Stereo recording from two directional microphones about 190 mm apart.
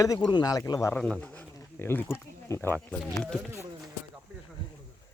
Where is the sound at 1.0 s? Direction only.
5° left (ahead or behind).